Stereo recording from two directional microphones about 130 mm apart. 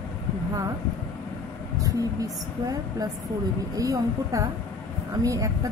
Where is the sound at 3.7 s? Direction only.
25° right (ahead or behind).